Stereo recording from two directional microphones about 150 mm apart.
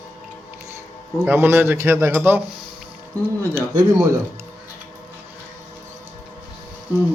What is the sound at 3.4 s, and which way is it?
Speech, 15° right (ahead or behind).